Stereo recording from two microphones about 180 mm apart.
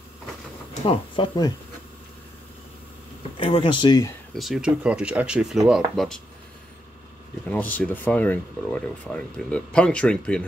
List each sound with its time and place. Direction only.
0.8 s speech: 30° left (ahead or behind)
3.3 s speech: 30° left (ahead or behind)
4.4 s speech: centre (ahead or behind)
7.4 s speech: 10° left (ahead or behind)